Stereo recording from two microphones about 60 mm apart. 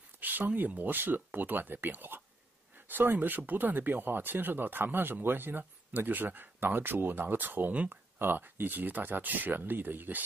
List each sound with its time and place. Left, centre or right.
0.2 s speech: right